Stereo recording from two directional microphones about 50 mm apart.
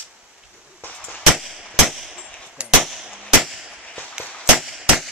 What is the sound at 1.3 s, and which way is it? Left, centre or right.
Clang, centre.